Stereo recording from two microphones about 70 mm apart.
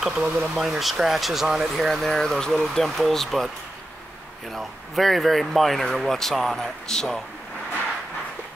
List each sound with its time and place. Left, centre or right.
0.0 s speech: centre
4.6 s speech: centre